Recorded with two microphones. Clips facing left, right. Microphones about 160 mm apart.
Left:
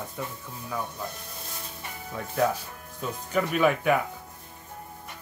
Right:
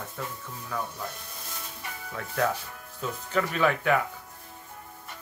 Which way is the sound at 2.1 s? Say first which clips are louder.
Left 2 dB; 10° left (ahead or behind).